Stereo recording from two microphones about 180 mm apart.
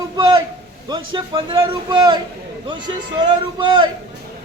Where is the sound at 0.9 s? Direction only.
25° right (ahead or behind).